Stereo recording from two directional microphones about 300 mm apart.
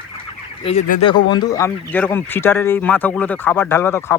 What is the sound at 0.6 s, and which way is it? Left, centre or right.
Fowl, left.